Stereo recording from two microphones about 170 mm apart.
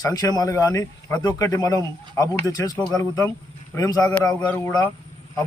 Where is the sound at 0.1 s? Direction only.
20° left (ahead or behind).